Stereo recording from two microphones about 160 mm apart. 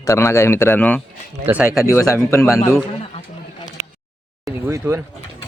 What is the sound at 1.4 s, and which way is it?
Speech, 10° right (ahead or behind).